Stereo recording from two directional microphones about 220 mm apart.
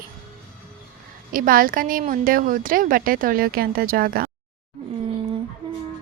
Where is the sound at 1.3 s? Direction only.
40° right (ahead or behind).